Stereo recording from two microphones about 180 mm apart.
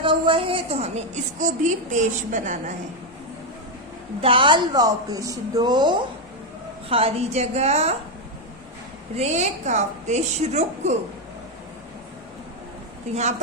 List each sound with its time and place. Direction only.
0.0 s a woman's voice: 30° right (ahead or behind)
4.2 s a woman's voice: 30° right (ahead or behind)
9.1 s a woman's voice: 40° right (ahead or behind)